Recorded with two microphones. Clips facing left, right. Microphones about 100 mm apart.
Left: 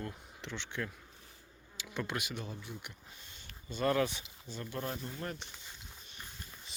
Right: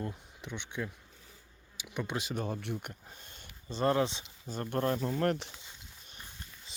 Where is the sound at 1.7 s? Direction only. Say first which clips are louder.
Right 1 dB; 15° right (ahead or behind).